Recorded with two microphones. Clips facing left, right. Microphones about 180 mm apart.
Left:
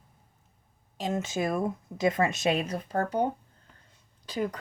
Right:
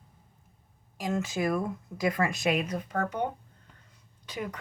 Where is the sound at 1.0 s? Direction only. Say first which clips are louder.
Even; 25° left (ahead or behind).